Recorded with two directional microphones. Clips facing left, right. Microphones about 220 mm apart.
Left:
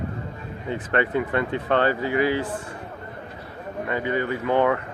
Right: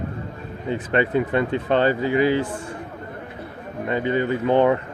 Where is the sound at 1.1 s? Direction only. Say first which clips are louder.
Right 3 dB; 25° right (ahead or behind).